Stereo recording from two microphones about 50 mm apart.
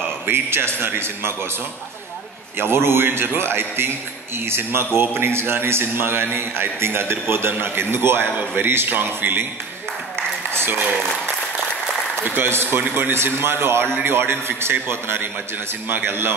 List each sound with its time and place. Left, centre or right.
0.3 s a man's voice: right
2.6 s a man's voice: right
10.5 s a sound: right
12.2 s a man's voice: right